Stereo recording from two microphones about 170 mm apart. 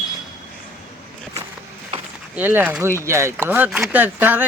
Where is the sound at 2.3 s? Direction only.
10° right (ahead or behind).